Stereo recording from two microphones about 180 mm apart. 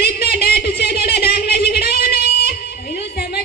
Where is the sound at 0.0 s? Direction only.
60° left (ahead or behind).